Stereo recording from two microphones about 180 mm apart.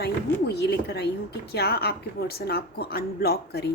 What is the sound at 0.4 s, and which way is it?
Speech, 65° left (ahead or behind).